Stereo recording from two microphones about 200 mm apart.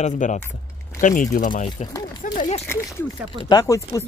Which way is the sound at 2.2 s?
40° left (ahead or behind).